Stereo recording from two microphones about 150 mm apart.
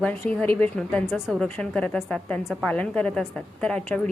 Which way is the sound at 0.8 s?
Centre (ahead or behind).